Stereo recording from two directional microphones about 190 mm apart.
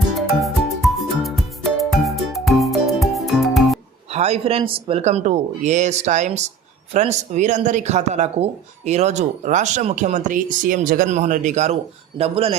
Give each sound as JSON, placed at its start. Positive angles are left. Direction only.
{"t": 0.1, "sound": "music", "side_deg": 0}
{"t": 4.1, "sound": "speech", "side_deg": -35}